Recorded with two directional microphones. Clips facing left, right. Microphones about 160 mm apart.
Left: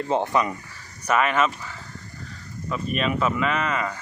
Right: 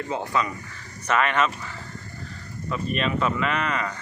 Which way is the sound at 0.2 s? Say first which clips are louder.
Left 3 dB; 20° left (ahead or behind).